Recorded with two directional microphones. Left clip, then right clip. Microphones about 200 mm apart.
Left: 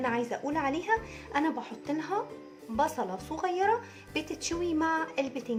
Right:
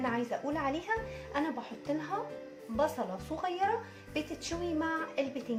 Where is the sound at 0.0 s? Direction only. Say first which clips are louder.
Left 3 dB; 40° left (ahead or behind).